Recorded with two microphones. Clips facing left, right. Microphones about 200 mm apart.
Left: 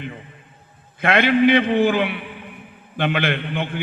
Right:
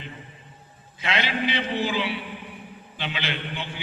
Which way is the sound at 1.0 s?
55° left (ahead or behind).